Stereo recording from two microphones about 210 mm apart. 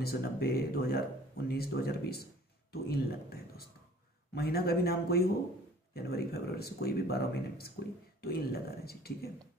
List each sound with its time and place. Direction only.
0.0 s speech: 45° left (ahead or behind)